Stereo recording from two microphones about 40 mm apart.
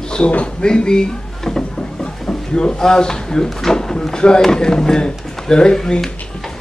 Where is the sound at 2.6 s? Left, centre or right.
Centre.